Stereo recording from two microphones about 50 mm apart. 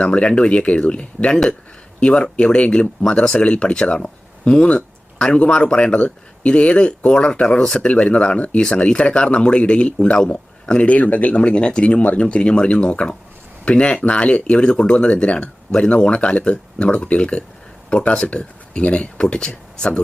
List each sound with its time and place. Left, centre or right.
0.0 s speech: left